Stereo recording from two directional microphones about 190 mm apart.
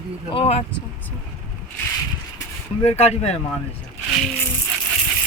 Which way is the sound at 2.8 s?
35° left (ahead or behind).